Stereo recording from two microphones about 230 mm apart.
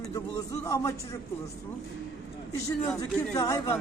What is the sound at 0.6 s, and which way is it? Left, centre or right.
Speech, centre.